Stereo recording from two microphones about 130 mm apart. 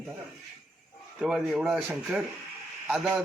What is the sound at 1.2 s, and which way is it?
Speech, 5° right (ahead or behind).